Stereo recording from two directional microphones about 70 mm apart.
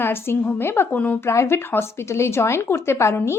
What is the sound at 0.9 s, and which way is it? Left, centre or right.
Speech, left.